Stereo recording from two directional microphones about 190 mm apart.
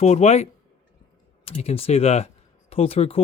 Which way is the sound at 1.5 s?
30° left (ahead or behind).